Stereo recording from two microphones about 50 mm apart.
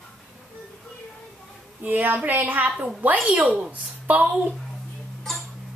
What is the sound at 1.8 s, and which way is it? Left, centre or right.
A woman's voice, right.